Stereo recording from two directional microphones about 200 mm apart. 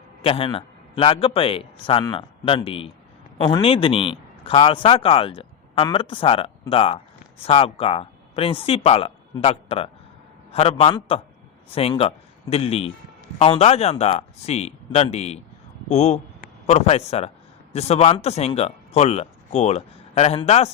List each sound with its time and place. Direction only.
0.2 s a man's voice: 25° left (ahead or behind)